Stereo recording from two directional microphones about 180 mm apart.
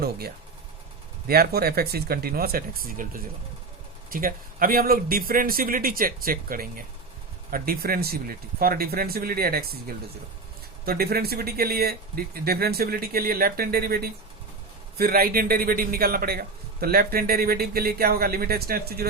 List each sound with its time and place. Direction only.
1.3 s a man's voice: 60° right (ahead or behind)